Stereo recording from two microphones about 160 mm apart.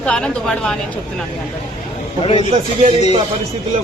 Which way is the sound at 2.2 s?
35° left (ahead or behind).